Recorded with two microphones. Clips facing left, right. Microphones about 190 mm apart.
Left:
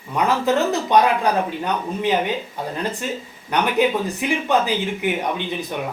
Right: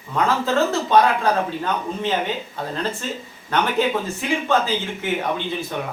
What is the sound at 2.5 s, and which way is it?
Speech, 15° left (ahead or behind).